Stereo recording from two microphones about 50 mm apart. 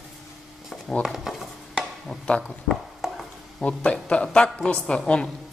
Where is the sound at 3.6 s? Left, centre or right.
Left.